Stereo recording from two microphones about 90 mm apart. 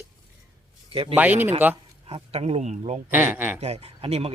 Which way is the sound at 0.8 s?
85° right.